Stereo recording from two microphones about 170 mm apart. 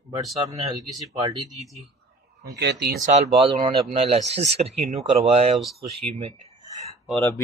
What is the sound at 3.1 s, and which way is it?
Speech, 35° right (ahead or behind).